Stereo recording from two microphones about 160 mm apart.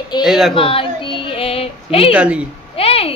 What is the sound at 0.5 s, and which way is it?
Speech, 35° left (ahead or behind).